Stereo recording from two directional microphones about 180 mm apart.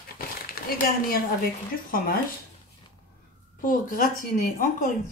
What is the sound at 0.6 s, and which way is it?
Speech, 55° left (ahead or behind).